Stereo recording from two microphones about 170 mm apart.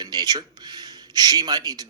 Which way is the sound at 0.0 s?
25° right (ahead or behind).